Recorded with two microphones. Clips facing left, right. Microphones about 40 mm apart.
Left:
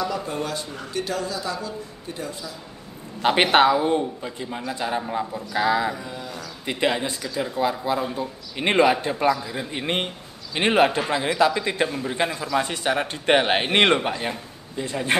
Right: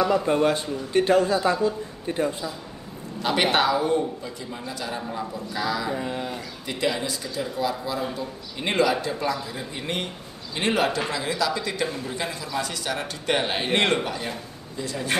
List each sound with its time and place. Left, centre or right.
0.0 s a man's voice: right
3.2 s a man's voice: left
5.9 s a man's voice: right
6.6 s a man's voice: left
12.5 s speech: left